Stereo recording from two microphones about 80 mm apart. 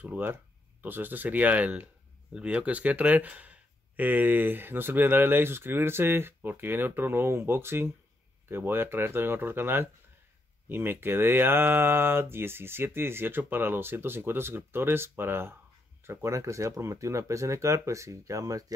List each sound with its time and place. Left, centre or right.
0.0 s speech: right